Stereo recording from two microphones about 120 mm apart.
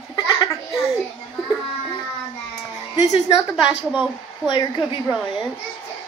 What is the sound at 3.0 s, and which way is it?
Speech, 65° left (ahead or behind).